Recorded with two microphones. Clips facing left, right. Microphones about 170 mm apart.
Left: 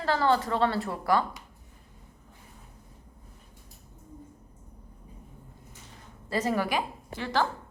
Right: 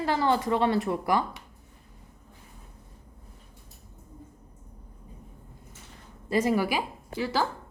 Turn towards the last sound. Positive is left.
turn(degrees=-5)  # may be behind; listen again after turning